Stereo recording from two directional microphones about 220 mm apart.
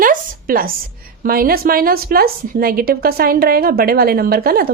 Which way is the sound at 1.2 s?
40° right (ahead or behind).